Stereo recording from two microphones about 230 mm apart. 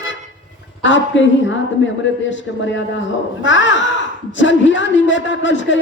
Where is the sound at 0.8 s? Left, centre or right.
Left.